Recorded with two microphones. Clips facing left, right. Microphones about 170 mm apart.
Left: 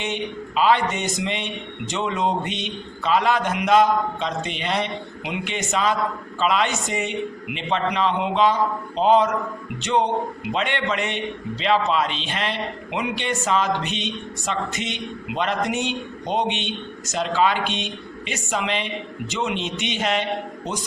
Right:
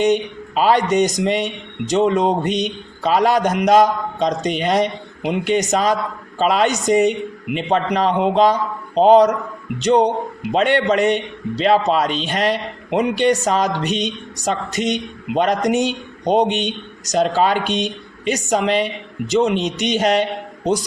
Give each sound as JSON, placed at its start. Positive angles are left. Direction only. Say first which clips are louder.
{"t": 0.0, "sound": "a man's voice", "louder": "right 10 dB", "side_deg": -45}